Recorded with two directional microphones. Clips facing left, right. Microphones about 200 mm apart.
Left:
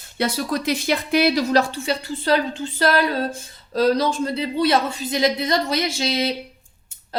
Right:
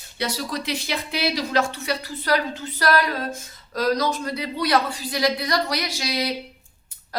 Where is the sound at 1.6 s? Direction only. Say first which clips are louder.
Left 2 dB; 30° left (ahead or behind).